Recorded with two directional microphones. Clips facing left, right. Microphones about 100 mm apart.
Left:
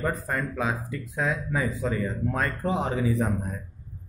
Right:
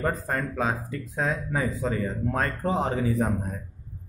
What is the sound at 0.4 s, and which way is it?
Speech, 35° right (ahead or behind).